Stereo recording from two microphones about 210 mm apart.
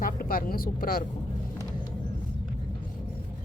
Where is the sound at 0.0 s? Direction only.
45° left (ahead or behind).